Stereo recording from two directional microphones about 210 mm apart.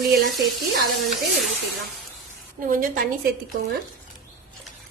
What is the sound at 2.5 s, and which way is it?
Speech, 40° right (ahead or behind).